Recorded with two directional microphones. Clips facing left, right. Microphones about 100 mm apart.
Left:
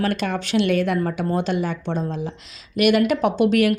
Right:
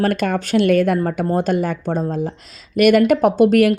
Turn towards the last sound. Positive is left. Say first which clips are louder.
# right 5 dB
turn(degrees=-45)  # may be behind; listen again after turning